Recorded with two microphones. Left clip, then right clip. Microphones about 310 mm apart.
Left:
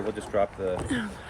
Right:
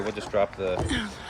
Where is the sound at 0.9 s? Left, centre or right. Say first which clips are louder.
Right 1 dB; centre.